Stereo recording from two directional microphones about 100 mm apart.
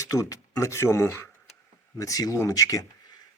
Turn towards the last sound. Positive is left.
turn(degrees=40)  # may be behind; listen again after turning